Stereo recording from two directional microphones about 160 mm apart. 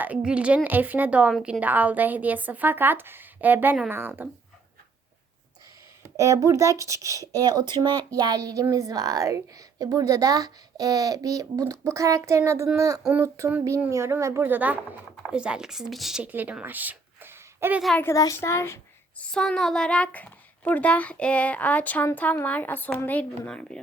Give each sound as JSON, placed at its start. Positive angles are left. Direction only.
{"t": 0.0, "sound": "a woman's voice", "side_deg": -5}
{"t": 6.1, "sound": "speech", "side_deg": -20}
{"t": 13.0, "sound": "speech", "side_deg": -5}
{"t": 13.2, "sound": "a woman's voice", "side_deg": -15}
{"t": 18.0, "sound": "speech", "side_deg": 20}
{"t": 19.3, "sound": "speech", "side_deg": 5}